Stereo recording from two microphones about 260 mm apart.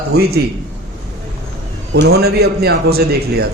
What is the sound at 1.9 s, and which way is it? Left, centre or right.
Speech, right.